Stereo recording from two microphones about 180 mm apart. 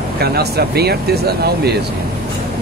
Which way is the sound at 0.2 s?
60° right (ahead or behind).